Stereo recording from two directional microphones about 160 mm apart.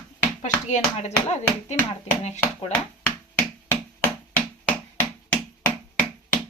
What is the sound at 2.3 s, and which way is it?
Speech, 5° left (ahead or behind).